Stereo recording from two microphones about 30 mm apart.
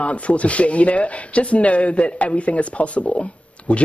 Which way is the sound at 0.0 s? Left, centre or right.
Left.